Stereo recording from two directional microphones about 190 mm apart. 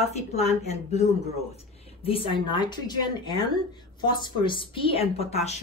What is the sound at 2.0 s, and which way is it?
A woman's voice, 30° left (ahead or behind).